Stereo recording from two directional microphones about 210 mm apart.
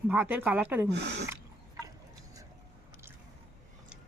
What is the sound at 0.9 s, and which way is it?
Speech, 55° right (ahead or behind).